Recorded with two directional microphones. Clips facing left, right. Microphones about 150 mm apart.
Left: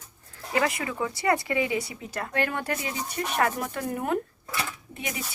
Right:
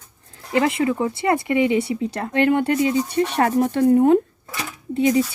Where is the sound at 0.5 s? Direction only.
25° right (ahead or behind).